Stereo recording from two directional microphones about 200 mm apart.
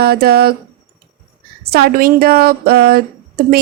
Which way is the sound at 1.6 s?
50° right (ahead or behind).